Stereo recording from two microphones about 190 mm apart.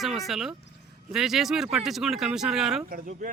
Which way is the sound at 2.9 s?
45° right (ahead or behind).